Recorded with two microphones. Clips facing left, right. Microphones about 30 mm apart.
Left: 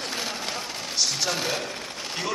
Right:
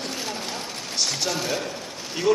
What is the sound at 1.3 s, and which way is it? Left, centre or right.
Speech, centre.